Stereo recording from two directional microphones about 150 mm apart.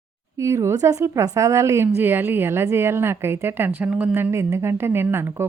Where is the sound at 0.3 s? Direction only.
20° right (ahead or behind).